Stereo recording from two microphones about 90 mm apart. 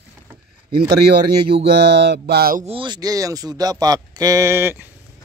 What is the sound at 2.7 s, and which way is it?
Speech, 70° right (ahead or behind).